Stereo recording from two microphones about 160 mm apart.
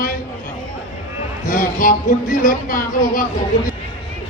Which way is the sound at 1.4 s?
60° left (ahead or behind).